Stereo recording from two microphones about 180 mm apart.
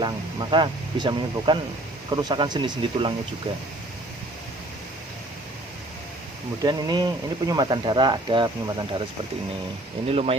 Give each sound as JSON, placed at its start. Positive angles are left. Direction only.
{"t": 0.0, "sound": "speech", "side_deg": -25}
{"t": 6.6, "sound": "speech", "side_deg": -20}
{"t": 10.1, "sound": "speech", "side_deg": -35}